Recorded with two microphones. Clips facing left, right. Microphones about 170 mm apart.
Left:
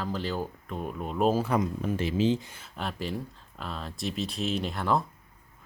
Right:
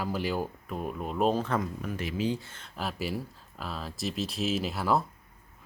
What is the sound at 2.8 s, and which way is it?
Speech, 5° right (ahead or behind).